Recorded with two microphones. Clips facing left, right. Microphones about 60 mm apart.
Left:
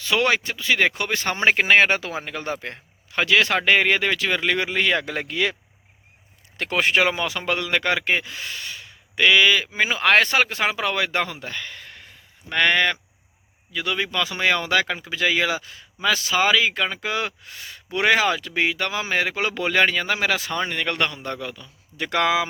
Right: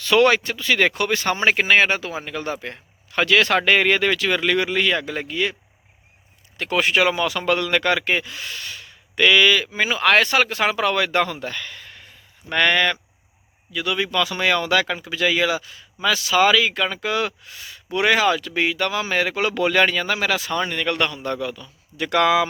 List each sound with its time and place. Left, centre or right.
0.0 s speech: centre; by 1.9 s left
1.9 s speech: left
2.2 s speech: left
3.2 s speech: centre
4.9 s speech: left
6.7 s speech: left; by 11.5 s centre
11.5 s speech: left
13.7 s speech: left
16.3 s speech: left
17.4 s speech: left
17.9 s speech: left